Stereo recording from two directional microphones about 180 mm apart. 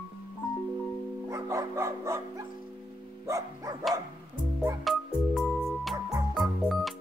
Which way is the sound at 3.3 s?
15° right (ahead or behind).